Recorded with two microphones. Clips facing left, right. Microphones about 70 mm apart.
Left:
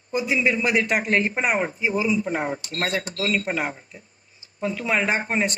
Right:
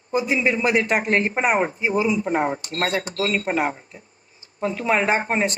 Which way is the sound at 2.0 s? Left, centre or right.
Centre.